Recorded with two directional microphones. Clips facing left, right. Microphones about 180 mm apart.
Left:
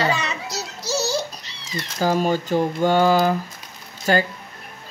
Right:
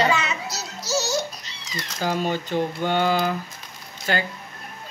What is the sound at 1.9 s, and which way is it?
Speech, 40° left (ahead or behind).